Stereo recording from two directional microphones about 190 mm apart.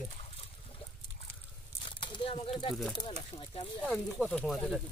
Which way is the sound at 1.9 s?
25° left (ahead or behind).